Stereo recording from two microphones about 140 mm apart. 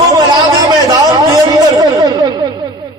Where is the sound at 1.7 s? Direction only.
30° right (ahead or behind).